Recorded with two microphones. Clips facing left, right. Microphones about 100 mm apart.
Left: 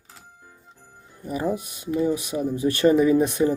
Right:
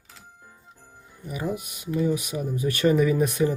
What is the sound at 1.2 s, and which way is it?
Speech, 35° left (ahead or behind).